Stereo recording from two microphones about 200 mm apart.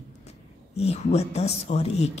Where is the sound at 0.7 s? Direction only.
30° left (ahead or behind).